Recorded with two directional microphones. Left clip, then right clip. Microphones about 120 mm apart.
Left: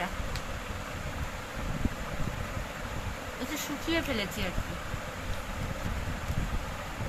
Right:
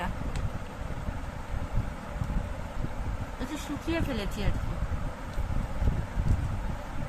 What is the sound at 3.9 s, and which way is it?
Speech, 20° right (ahead or behind).